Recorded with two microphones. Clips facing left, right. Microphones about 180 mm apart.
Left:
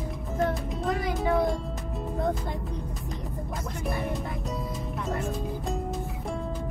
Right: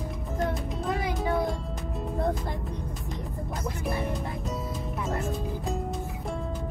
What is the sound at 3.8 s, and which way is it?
Music, centre (ahead or behind).